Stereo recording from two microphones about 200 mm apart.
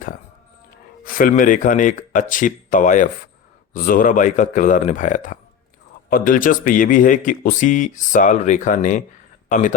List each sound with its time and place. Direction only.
1.0 s speech: 45° left (ahead or behind)